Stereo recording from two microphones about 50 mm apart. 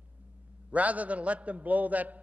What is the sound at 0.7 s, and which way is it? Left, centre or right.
A man's voice, right.